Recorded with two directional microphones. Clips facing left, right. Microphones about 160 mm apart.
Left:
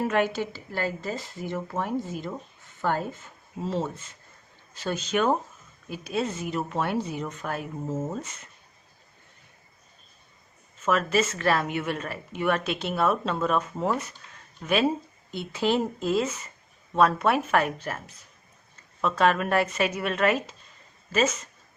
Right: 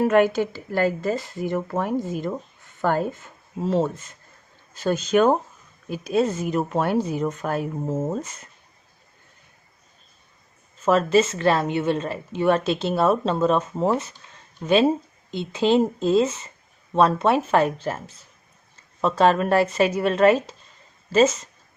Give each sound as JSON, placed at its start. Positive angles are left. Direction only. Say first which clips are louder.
{"t": 0.1, "sound": "a woman's voice", "louder": "right 7 dB", "side_deg": -50}
{"t": 4.7, "sound": "a woman's voice", "louder": "right 7 dB", "side_deg": -45}
{"t": 10.8, "sound": "a woman's voice", "louder": "right 6 dB", "side_deg": -30}